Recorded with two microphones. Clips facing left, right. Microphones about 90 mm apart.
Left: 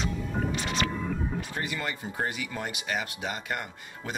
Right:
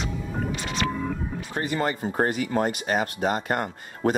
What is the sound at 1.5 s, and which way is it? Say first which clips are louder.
Speech: right 12 dB; 40° right (ahead or behind).